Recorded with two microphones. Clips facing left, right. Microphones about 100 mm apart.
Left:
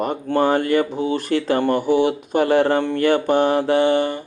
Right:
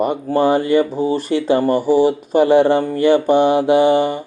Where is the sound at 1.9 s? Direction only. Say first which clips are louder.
Right 4 dB; 60° left (ahead or behind).